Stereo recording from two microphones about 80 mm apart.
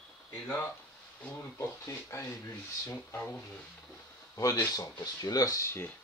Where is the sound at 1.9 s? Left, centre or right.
Left.